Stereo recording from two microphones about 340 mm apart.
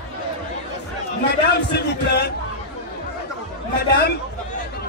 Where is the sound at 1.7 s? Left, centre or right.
Left.